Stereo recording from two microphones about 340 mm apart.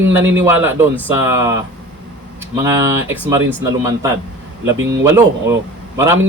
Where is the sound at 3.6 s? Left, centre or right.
Centre.